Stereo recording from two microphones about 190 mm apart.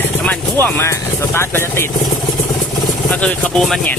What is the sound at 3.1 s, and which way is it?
Speech, 5° left (ahead or behind).